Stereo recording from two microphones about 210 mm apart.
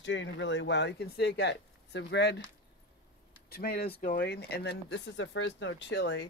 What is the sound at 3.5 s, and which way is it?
Speech, 45° left (ahead or behind).